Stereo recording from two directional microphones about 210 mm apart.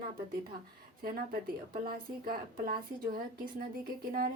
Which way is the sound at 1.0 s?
45° right (ahead or behind).